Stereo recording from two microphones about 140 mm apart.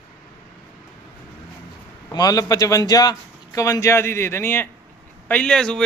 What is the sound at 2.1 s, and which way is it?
A man's voice, 25° left (ahead or behind).